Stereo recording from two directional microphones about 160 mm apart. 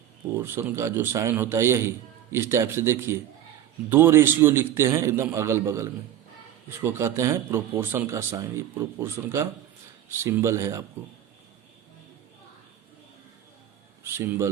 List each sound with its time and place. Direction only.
0.3 s speech: 15° right (ahead or behind)
14.0 s speech: 15° right (ahead or behind)